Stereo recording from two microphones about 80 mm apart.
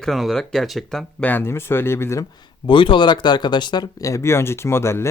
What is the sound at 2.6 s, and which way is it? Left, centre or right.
Speech, left.